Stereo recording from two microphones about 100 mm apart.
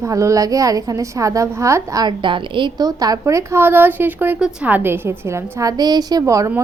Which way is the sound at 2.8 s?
40° right (ahead or behind).